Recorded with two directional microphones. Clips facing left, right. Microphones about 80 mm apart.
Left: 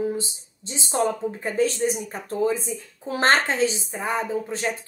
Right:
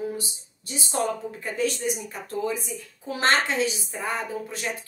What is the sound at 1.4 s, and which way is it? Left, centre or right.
A woman's voice, left.